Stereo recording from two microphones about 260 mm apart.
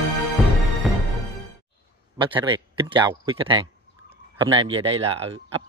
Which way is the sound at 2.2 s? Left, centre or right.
Centre.